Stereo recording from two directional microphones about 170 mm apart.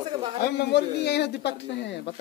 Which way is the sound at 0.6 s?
80° left.